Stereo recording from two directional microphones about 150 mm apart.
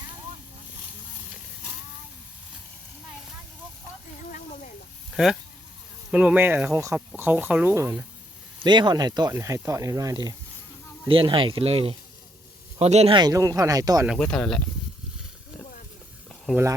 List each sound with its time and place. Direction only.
5.1 s speech: 5° right (ahead or behind)
8.6 s speech: 30° right (ahead or behind)
11.1 s speech: 35° right (ahead or behind)
13.1 s speech: 25° right (ahead or behind)
14.1 s speech: 5° left (ahead or behind)